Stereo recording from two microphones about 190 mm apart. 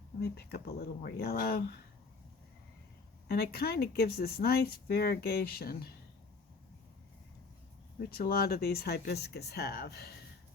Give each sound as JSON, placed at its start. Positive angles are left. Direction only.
{"t": 0.2, "sound": "speech", "side_deg": 55}
{"t": 3.2, "sound": "speech", "side_deg": 55}
{"t": 7.9, "sound": "speech", "side_deg": 50}